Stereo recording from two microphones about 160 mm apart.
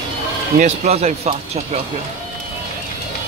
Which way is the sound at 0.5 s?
45° right (ahead or behind).